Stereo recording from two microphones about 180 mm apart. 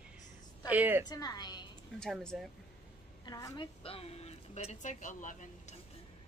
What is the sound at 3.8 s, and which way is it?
Speech, 35° left (ahead or behind).